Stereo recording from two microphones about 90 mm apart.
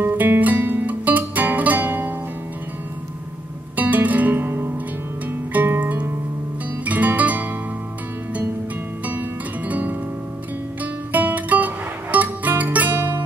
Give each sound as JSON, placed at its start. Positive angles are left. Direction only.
{"t": 0.0, "sound": "music", "side_deg": -20}
{"t": 3.7, "sound": "music", "side_deg": -20}
{"t": 9.0, "sound": "music", "side_deg": -15}